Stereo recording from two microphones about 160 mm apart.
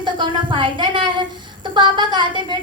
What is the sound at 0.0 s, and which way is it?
A woman's voice, 30° right (ahead or behind).